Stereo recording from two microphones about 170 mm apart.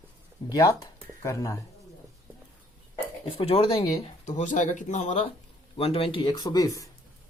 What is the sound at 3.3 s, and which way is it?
Speech, 35° left (ahead or behind).